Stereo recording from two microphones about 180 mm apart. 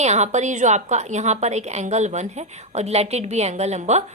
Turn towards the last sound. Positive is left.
turn(degrees=-40)  # may be behind; listen again after turning